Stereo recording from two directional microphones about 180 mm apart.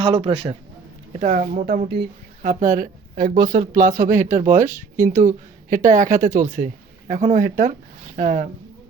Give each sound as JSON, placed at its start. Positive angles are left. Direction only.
{"t": 0.0, "sound": "a man's voice", "side_deg": -30}
{"t": 1.2, "sound": "speech", "side_deg": -45}
{"t": 1.6, "sound": "speech", "side_deg": -55}
{"t": 5.7, "sound": "a woman's voice", "side_deg": -20}
{"t": 6.0, "sound": "speech", "side_deg": -45}